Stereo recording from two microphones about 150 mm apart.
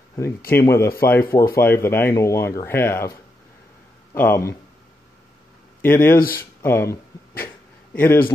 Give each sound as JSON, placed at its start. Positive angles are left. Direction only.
{"t": 0.5, "sound": "speech", "side_deg": 20}
{"t": 4.1, "sound": "speech", "side_deg": 15}
{"t": 5.8, "sound": "speech", "side_deg": 15}
{"t": 6.1, "sound": "speech", "side_deg": 75}
{"t": 6.6, "sound": "a sound", "side_deg": 15}